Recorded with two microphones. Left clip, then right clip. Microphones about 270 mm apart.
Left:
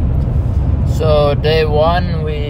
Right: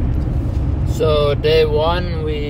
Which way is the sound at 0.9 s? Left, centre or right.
Centre.